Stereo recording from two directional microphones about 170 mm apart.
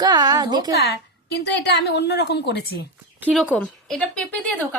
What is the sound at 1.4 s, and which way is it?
A woman's voice, 80° left.